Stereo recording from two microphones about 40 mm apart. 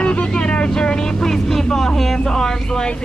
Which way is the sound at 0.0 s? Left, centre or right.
Left.